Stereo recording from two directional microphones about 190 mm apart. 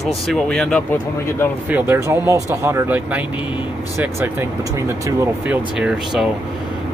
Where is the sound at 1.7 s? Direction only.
10° right (ahead or behind).